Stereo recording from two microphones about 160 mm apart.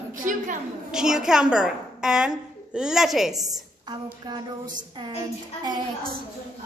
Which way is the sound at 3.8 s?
25° right (ahead or behind).